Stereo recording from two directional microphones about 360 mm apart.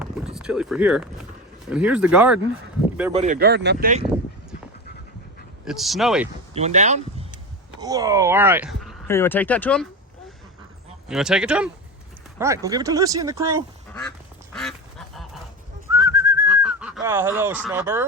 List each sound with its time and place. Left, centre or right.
0.3 s speech: centre
3.1 s speech: centre
5.6 s speech: centre
6.5 s speech: centre
11.1 s speech: centre
14.5 s duck: centre
15.9 s whistling: centre